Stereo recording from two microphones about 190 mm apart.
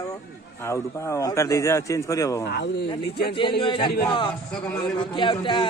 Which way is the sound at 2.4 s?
65° left (ahead or behind).